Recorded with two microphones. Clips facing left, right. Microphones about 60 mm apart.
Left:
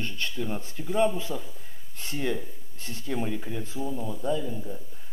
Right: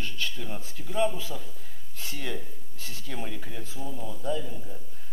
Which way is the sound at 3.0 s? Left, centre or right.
Centre.